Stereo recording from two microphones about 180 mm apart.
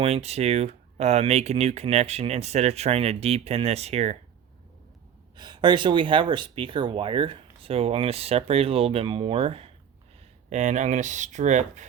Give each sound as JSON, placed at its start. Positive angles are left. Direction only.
{"t": 0.0, "sound": "speech", "side_deg": -35}
{"t": 5.4, "sound": "speech", "side_deg": -25}